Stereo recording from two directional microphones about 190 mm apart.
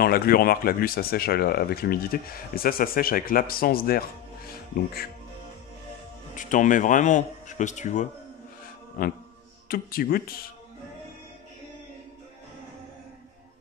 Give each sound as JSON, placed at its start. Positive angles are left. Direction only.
{"t": 0.0, "sound": "speech", "side_deg": 50}
{"t": 6.3, "sound": "speech", "side_deg": 40}
{"t": 9.7, "sound": "speech", "side_deg": 50}